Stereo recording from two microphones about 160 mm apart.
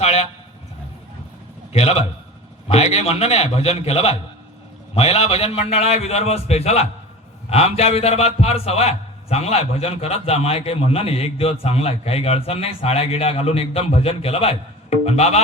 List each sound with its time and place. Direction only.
0.0 s a man's voice: 40° left (ahead or behind)
1.7 s a man's voice: 40° left (ahead or behind)